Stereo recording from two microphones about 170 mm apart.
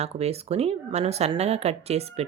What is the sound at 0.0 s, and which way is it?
A woman's voice, 40° right (ahead or behind).